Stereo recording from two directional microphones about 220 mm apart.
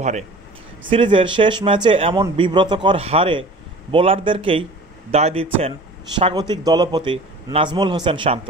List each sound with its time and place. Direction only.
0.8 s speech: 25° right (ahead or behind)